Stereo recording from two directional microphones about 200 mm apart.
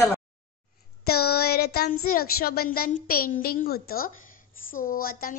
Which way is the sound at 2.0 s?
50° left (ahead or behind).